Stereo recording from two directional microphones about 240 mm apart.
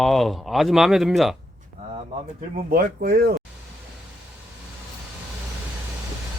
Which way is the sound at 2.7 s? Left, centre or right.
Right.